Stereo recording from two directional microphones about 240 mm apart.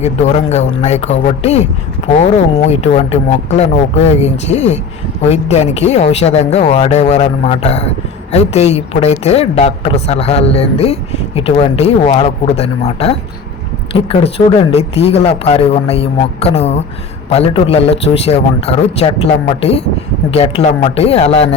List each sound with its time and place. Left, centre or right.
0.0 s speech: left
2.6 s speech: left
20.3 s speech: left